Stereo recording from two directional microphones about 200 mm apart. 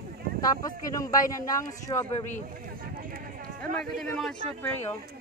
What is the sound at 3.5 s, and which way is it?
Speech, 5° left (ahead or behind).